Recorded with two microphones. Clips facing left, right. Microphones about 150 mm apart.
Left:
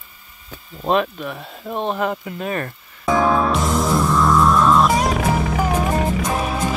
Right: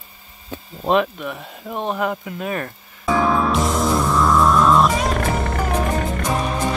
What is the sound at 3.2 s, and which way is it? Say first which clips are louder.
Music: left 1 dB; centre (ahead or behind).